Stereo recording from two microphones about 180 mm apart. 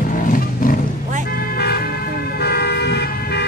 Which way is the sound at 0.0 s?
50° left (ahead or behind).